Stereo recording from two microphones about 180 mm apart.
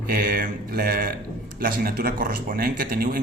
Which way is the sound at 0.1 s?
55° right (ahead or behind).